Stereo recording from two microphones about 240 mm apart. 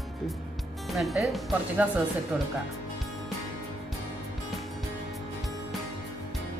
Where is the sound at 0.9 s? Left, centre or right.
Centre.